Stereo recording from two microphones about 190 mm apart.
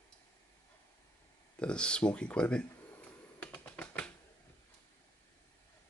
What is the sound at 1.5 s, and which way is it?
Speech, 5° left (ahead or behind).